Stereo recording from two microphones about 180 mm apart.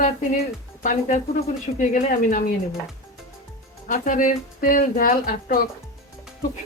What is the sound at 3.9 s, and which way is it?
A woman's voice, 50° left (ahead or behind).